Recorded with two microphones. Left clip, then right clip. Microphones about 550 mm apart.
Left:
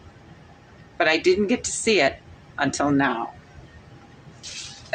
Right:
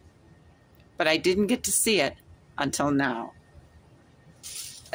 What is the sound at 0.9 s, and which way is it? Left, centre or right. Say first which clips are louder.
A woman's voice: left 4 dB; right.